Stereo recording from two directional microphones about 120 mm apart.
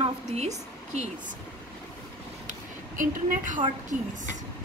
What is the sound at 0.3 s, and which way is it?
Speech, 70° right (ahead or behind).